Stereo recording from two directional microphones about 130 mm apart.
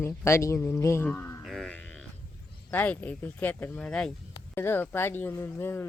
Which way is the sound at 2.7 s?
15° left (ahead or behind).